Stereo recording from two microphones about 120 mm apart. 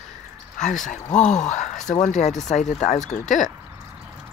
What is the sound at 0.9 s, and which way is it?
Speech, 90° left.